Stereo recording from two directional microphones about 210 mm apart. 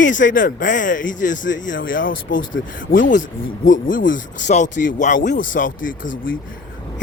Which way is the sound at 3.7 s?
40° left (ahead or behind).